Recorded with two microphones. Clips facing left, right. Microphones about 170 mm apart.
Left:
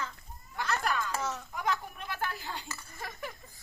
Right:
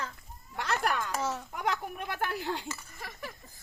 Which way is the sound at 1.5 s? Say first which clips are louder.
Right 1 dB; 70° right (ahead or behind).